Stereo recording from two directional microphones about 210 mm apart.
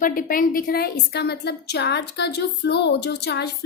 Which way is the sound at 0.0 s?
40° left (ahead or behind).